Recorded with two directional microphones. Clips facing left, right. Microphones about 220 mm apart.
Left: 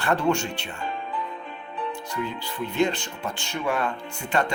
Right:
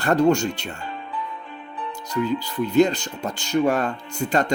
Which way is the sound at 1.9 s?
40° right (ahead or behind).